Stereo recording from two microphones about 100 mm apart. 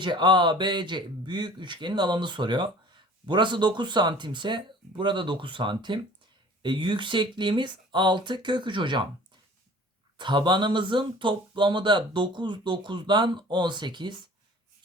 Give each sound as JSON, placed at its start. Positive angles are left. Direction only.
{"t": 0.0, "sound": "speech", "side_deg": -50}
{"t": 10.2, "sound": "speech", "side_deg": -50}